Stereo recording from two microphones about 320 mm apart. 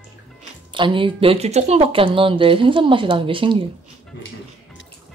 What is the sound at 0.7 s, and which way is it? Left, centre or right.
Speech, centre.